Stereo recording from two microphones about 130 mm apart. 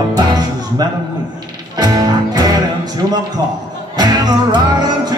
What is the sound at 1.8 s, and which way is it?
Music, 30° right (ahead or behind).